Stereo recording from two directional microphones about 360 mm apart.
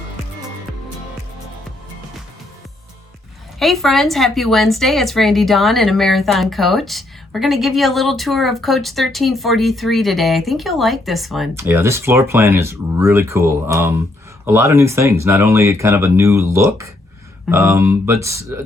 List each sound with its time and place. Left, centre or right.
3.6 s a woman's voice: centre